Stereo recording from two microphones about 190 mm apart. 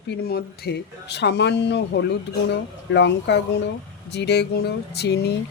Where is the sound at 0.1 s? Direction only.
55° left (ahead or behind).